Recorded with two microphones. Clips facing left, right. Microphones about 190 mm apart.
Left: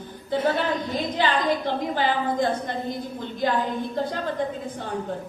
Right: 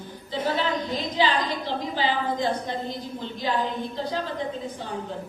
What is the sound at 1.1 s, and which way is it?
A woman's voice, 55° left (ahead or behind).